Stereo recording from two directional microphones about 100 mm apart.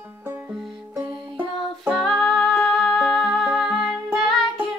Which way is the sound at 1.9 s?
5° left (ahead or behind).